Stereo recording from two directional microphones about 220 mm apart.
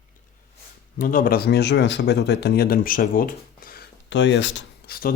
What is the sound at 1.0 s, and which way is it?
Speech, 40° left (ahead or behind).